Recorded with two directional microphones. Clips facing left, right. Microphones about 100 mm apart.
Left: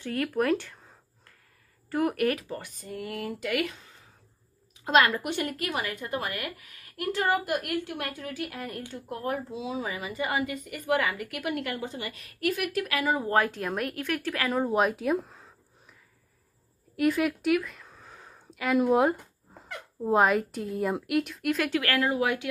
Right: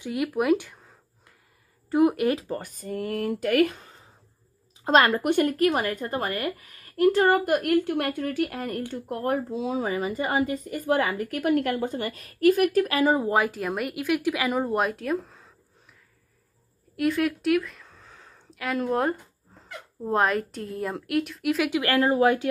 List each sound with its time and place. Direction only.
0.0 s speech: 10° right (ahead or behind)
1.9 s speech: 20° right (ahead or behind)
2.4 s speech: 40° right (ahead or behind)
13.3 s speech: 5° right (ahead or behind)
16.9 s speech: centre (ahead or behind)
21.7 s speech: 25° right (ahead or behind)